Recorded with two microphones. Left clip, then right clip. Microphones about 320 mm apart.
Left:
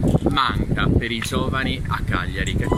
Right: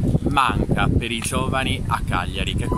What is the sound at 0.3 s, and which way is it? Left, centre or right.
Speech, centre.